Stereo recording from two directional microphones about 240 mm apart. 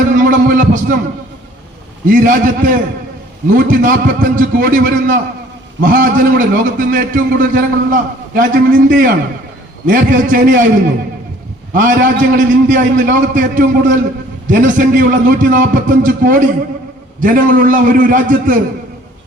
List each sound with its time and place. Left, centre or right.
0.2 s a sound: right
2.0 s a man's voice: right
11.7 s a man's voice: right